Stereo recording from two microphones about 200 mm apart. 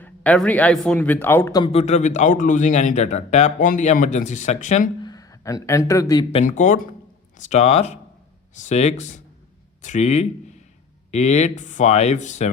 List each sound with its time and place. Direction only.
0.0 s speech: 10° left (ahead or behind); by 4.9 s 35° left (ahead or behind)
5.0 s speech: 20° left (ahead or behind)
6.4 s a man's voice: 40° left (ahead or behind)